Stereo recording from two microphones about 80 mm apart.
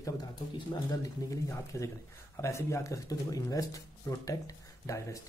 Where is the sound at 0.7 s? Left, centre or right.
Left.